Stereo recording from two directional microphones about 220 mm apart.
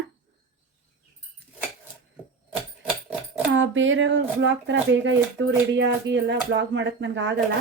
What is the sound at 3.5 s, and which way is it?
Speech, 60° right (ahead or behind).